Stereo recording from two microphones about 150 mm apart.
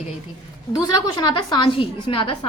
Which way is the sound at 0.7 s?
25° left (ahead or behind).